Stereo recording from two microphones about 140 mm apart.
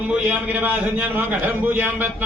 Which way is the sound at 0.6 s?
15° right (ahead or behind).